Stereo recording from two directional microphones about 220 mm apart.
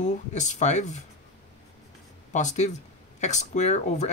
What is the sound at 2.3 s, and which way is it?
Speech, 35° left (ahead or behind).